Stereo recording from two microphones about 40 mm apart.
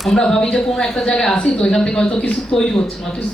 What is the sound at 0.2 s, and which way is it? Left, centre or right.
Speech, centre.